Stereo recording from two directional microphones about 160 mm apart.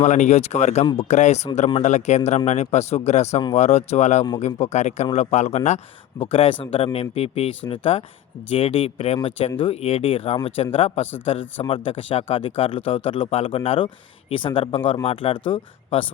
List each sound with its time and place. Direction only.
0.0 s speech: 50° left (ahead or behind)
6.3 s speech: 35° left (ahead or behind)